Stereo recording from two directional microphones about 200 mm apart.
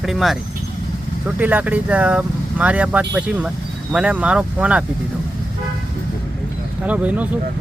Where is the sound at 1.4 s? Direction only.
10° right (ahead or behind).